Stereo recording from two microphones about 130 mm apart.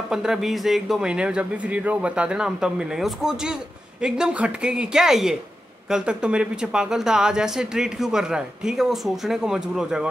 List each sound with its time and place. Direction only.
0.1 s speech: 5° right (ahead or behind)